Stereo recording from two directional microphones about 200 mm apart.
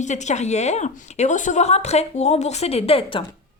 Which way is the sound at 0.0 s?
35° left (ahead or behind).